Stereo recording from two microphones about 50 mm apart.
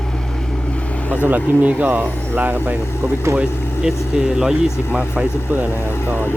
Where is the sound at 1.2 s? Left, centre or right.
Right.